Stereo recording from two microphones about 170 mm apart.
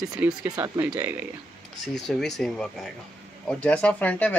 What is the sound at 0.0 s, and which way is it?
Speech, 5° right (ahead or behind).